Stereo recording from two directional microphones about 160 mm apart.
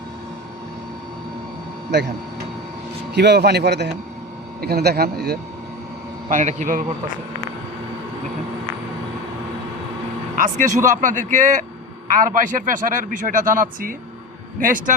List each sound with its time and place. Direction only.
3.2 s a man's voice: 90° right; by 5.4 s 75° right (ahead or behind)
6.2 s speech: 50° right (ahead or behind)
10.3 s speech: 55° right (ahead or behind)